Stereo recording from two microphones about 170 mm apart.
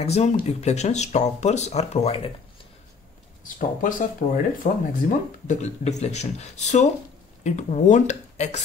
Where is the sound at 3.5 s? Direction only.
50° left (ahead or behind).